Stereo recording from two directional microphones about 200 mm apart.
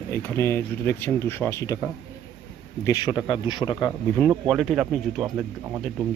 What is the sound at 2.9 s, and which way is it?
Speech, 20° left (ahead or behind).